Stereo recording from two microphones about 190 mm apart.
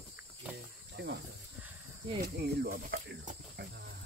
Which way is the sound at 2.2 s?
55° right (ahead or behind).